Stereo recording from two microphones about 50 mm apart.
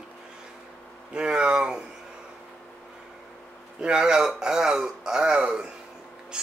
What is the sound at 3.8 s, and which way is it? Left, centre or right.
Speech, centre.